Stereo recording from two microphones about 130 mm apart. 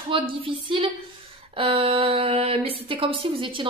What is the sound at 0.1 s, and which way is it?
A woman's voice, 40° right (ahead or behind).